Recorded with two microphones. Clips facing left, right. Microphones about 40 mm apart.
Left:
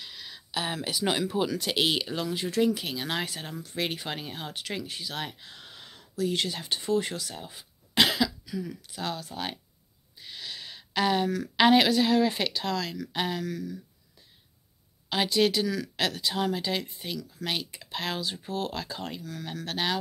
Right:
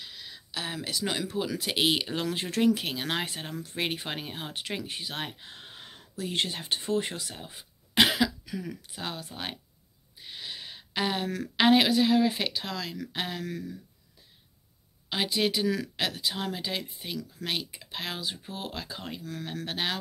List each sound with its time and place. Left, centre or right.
0.0 s a sound: centre
0.5 s speech: centre
1.5 s a woman's voice: centre
2.3 s speech: right
8.5 s speech: right
9.0 s speech: centre
10.1 s a sound: centre
11.5 s a woman's voice: centre
13.4 s speech: right
15.0 s a woman's voice: centre
15.6 s speech: right
16.0 s a woman's voice: centre